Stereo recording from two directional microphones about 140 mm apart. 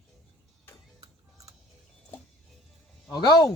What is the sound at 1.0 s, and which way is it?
Music, 25° right (ahead or behind).